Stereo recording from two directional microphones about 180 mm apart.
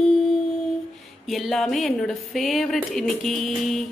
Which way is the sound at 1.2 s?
Centre (ahead or behind).